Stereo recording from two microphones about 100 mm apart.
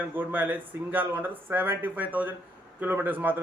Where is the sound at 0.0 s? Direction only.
20° right (ahead or behind).